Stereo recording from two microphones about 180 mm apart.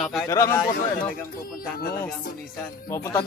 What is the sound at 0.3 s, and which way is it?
Speech, 20° left (ahead or behind).